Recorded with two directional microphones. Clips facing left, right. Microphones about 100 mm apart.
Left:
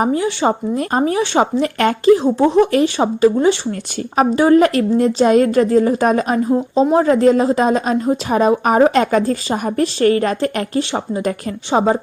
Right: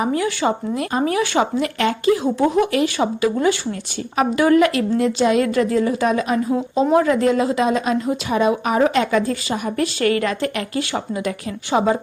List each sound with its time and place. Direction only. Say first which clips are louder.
0.1 s speech: left 3 dB; 25° left (ahead or behind)
1.4 s a woman's voice: left 6 dB; 40° left (ahead or behind)
6.7 s a woman's voice: left 2 dB; 30° left (ahead or behind)